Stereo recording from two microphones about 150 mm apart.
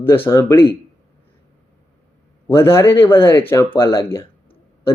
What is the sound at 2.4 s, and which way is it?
Speech, 15° left (ahead or behind).